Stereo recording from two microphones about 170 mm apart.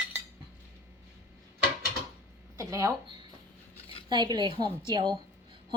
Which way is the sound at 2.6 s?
20° right (ahead or behind).